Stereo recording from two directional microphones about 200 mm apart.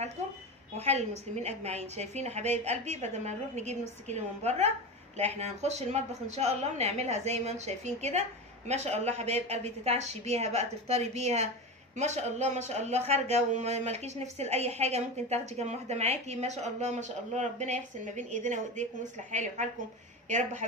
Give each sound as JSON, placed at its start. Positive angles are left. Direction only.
{"t": 0.7, "sound": "a woman's voice", "side_deg": -35}